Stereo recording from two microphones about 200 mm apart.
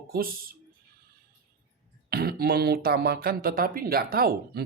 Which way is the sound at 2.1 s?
50° right (ahead or behind).